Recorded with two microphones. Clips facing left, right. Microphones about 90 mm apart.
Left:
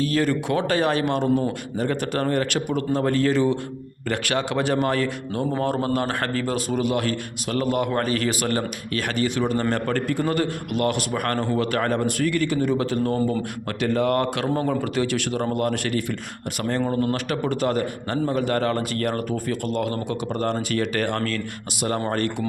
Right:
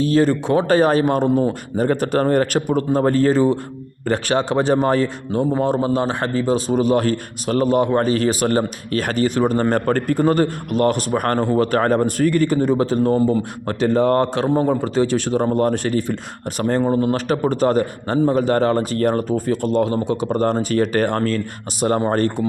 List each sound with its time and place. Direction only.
0.0 s a man's voice: 35° right (ahead or behind)
5.5 s a man's voice: 20° right (ahead or behind); by 22.4 s 35° right (ahead or behind)